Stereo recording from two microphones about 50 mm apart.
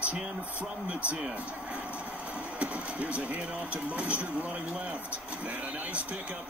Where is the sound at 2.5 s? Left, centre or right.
Right.